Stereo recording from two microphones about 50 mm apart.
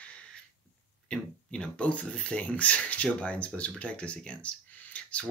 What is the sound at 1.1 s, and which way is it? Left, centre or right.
Speech, centre.